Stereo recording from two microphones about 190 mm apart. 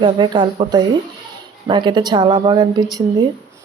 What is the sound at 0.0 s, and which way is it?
A woman's voice, 25° right (ahead or behind).